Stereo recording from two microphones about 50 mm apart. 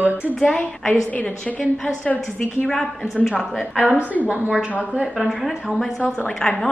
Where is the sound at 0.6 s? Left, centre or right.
Left.